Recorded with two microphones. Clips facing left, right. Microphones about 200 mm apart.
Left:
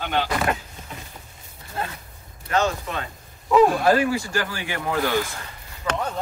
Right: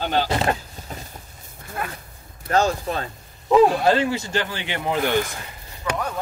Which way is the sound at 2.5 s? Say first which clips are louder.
Right 3 dB; 35° right (ahead or behind).